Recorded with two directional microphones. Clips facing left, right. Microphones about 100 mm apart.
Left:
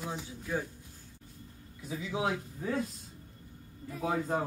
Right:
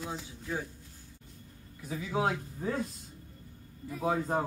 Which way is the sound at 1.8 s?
45° right (ahead or behind).